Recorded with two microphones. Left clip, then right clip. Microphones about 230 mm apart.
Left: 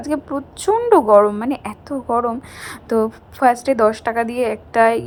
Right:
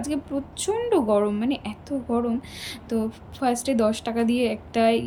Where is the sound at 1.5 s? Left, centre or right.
Centre.